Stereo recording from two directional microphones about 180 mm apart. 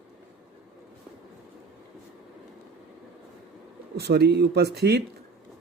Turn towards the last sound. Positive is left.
turn(degrees=-65)  # may be behind; listen again after turning